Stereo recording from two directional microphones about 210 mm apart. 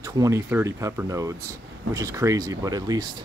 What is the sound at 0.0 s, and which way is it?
Speech, 15° right (ahead or behind).